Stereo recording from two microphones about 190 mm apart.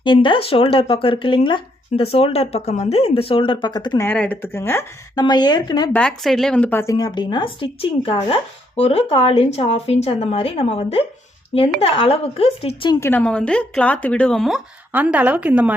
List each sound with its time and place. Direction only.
0.0 s speech: 25° left (ahead or behind)
5.9 s a woman's voice: 5° left (ahead or behind); by 13.0 s 30° left (ahead or behind)
13.0 s speech: 10° left (ahead or behind); by 15.7 s 5° right (ahead or behind)